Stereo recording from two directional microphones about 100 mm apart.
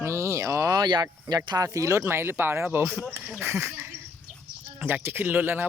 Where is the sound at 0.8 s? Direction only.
45° right (ahead or behind).